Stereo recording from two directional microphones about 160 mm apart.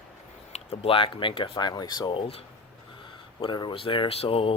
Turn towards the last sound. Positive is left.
turn(degrees=35)  # may be behind; listen again after turning